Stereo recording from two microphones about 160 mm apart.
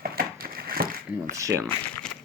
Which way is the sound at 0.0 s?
70° right (ahead or behind).